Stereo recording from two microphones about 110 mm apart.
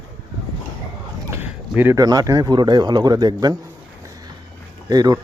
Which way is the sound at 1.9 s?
30° right (ahead or behind).